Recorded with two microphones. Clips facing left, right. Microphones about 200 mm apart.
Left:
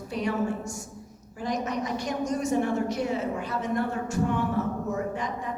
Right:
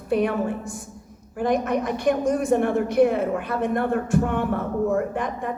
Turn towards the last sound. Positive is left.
turn(degrees=-55)  # may be behind; listen again after turning